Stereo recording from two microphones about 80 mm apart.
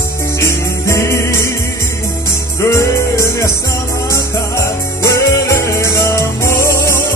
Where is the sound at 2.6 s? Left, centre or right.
Left.